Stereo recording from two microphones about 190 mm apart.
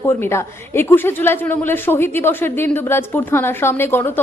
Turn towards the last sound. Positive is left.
turn(degrees=10)  # may be behind; listen again after turning